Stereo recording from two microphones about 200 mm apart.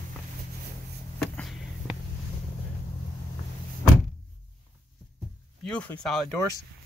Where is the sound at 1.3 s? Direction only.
Centre (ahead or behind).